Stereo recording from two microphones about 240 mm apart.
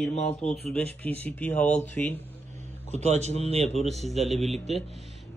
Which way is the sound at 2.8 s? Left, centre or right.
Right.